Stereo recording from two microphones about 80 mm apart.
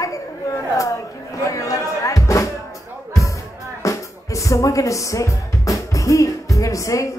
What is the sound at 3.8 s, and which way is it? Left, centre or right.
Speech, left.